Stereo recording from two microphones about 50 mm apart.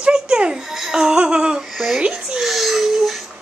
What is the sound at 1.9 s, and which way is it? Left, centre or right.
Speech, centre.